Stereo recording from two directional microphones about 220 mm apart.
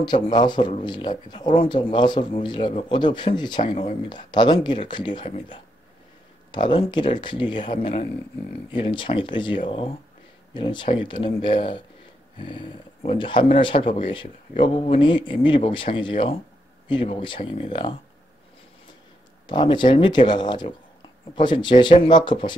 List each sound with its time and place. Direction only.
0.0 s speech: 20° left (ahead or behind)
19.4 s speech: 20° left (ahead or behind)